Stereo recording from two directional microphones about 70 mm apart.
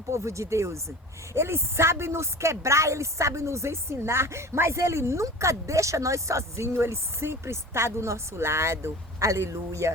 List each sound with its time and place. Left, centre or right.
0.1 s speech: right